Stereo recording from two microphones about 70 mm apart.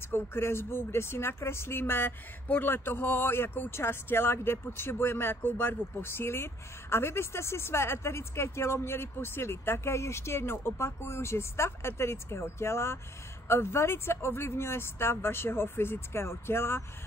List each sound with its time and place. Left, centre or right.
0.1 s speech: left